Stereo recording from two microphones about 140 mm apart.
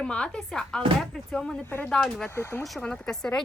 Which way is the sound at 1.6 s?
15° left (ahead or behind).